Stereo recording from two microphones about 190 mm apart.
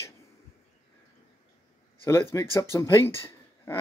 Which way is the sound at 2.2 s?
20° left (ahead or behind).